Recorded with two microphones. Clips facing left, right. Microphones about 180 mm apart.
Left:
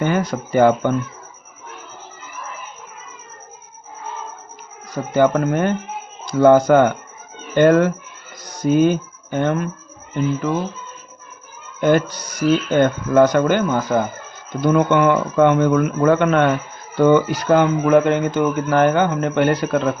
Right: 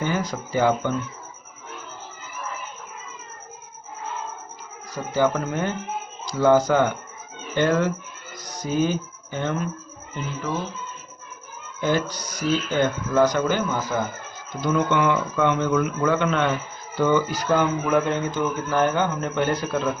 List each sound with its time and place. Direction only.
0.0 s speech: 60° left (ahead or behind)
5.1 s speech: 55° left (ahead or behind)
11.8 s speech: 55° left (ahead or behind)